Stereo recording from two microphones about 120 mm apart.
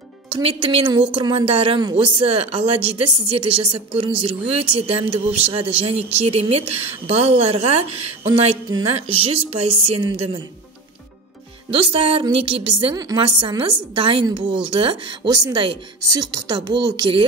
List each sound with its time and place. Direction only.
0.3 s a woman's voice: 50° right (ahead or behind)
11.7 s a woman's voice: 50° right (ahead or behind)